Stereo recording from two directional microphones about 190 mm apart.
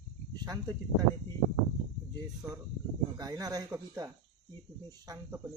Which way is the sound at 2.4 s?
15° right (ahead or behind).